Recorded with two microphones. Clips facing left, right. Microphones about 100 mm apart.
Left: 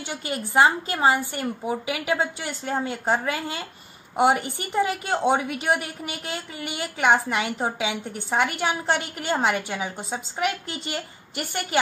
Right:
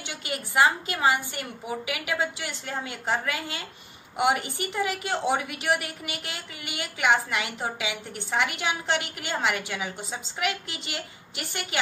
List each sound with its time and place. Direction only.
0.1 s a woman's voice: 35° left (ahead or behind)